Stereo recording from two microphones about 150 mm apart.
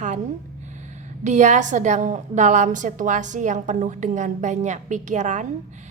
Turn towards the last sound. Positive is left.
turn(degrees=-55)  # may be behind; listen again after turning